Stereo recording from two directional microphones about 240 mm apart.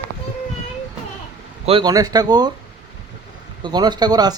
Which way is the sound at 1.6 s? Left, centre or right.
Right.